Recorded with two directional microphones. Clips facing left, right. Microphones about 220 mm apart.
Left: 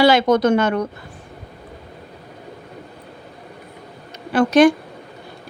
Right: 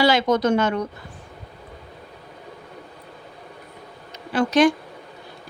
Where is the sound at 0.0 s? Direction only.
55° left (ahead or behind).